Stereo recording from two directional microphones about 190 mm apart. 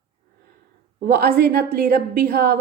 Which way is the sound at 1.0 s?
55° right (ahead or behind).